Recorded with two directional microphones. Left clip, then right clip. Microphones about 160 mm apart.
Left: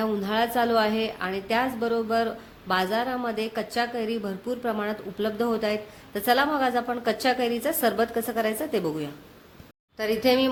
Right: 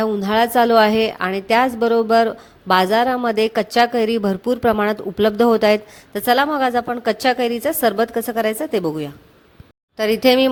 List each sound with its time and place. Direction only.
0.0 s a woman's voice: 50° right (ahead or behind)